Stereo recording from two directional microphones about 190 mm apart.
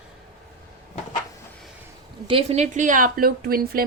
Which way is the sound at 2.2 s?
30° right (ahead or behind).